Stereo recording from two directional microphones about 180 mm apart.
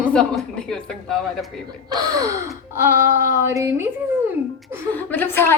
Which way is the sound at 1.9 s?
20° right (ahead or behind).